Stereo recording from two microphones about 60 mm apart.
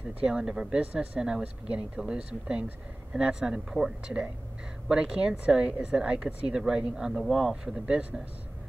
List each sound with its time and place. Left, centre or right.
0.2 s a man's voice: centre
7.2 s speech: centre
7.6 s a man's voice: centre